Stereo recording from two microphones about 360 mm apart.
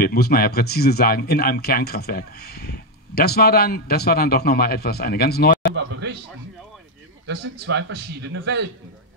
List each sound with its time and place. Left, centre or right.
0.0 s speech: left
5.8 s speech: right
7.5 s speech: right